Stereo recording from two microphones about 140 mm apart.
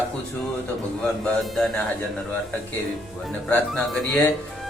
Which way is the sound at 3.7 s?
Centre (ahead or behind).